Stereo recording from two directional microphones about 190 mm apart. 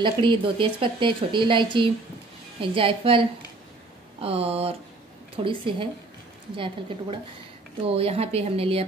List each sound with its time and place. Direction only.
0.0 s speech: 25° right (ahead or behind)